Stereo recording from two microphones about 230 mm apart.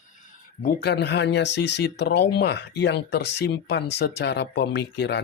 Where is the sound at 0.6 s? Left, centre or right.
Left.